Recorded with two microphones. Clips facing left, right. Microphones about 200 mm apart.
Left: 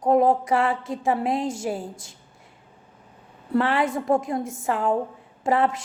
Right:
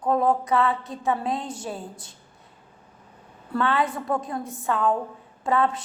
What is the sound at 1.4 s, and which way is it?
Speech, 90° left.